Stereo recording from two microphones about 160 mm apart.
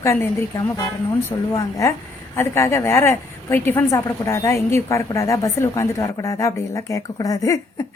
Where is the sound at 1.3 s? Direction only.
20° left (ahead or behind).